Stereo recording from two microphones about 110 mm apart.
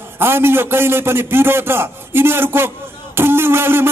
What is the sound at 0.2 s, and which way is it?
Speech, 20° right (ahead or behind).